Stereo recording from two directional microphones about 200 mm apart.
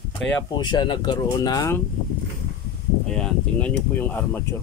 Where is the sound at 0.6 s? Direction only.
20° left (ahead or behind).